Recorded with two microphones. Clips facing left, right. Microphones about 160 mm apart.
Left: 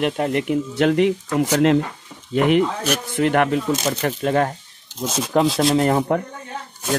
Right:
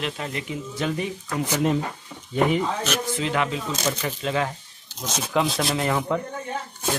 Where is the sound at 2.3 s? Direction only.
75° left (ahead or behind).